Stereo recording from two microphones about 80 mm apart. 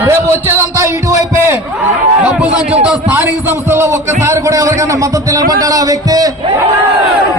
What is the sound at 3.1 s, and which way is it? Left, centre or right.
A man's voice, right.